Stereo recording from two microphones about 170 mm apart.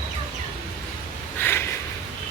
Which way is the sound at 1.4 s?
10° left (ahead or behind).